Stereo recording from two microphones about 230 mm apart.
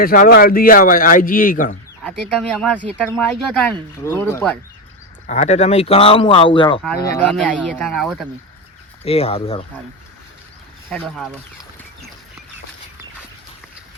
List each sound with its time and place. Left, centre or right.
0.0 s a man's voice: left
2.4 s speech: centre
5.2 s speech: left
7.3 s speech: centre
9.0 s speech: left